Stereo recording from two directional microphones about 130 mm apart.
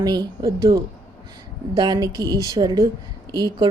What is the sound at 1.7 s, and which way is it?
Speech, 30° right (ahead or behind).